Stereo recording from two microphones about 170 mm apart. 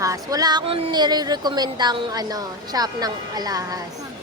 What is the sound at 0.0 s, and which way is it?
A woman's voice, 20° right (ahead or behind).